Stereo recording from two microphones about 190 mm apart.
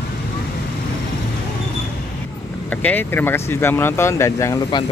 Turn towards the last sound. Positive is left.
turn(degrees=25)  # may be behind; listen again after turning